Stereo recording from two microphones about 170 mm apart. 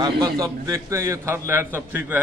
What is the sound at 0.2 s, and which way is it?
A man's voice, 20° right (ahead or behind).